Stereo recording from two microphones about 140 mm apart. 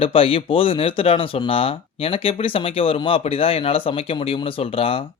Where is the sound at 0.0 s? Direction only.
40° left (ahead or behind).